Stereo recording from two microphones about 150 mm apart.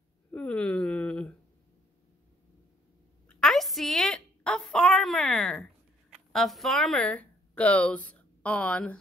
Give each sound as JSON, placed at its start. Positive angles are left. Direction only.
{"t": 0.3, "sound": "speech", "side_deg": 10}
{"t": 3.3, "sound": "a sound", "side_deg": 5}
{"t": 6.1, "sound": "speech", "side_deg": 0}